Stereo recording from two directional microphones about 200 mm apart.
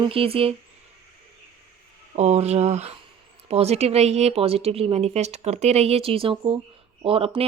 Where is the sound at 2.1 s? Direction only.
35° right (ahead or behind).